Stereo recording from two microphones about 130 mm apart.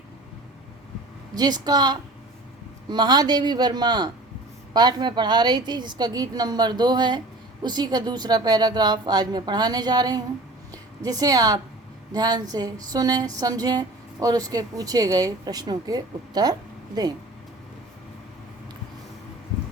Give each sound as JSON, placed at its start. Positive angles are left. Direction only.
{"t": 1.4, "sound": "a woman's voice", "side_deg": -30}